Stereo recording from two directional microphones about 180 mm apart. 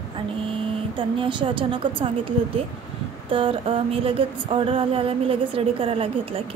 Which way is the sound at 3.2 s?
30° right (ahead or behind).